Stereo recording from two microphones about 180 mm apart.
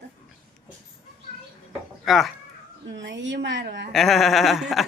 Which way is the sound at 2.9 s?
85° right.